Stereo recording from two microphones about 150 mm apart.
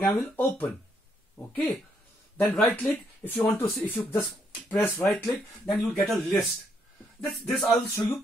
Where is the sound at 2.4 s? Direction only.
Centre (ahead or behind).